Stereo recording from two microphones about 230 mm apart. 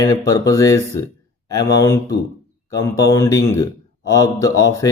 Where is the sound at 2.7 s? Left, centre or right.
Centre.